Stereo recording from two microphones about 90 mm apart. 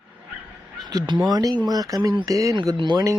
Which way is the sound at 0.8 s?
45° right (ahead or behind).